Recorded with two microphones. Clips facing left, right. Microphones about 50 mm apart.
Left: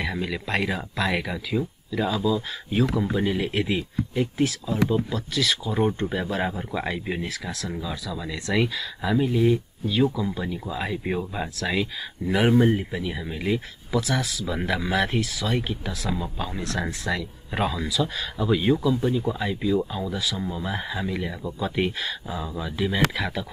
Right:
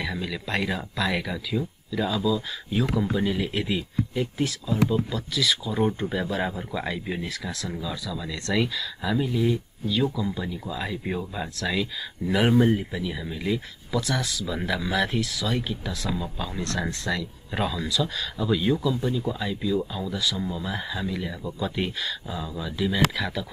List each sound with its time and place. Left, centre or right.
0.0 s a sound: centre
0.5 s speech: centre
4.4 s speech: centre
12.3 s speech: centre
13.9 s speech: centre
15.6 s speech: left
15.9 s speech: centre
17.2 s speech: centre